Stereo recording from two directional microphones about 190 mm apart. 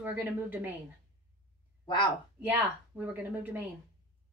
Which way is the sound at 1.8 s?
25° left (ahead or behind).